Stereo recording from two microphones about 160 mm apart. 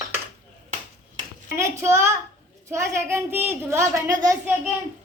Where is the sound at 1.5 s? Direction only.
15° right (ahead or behind).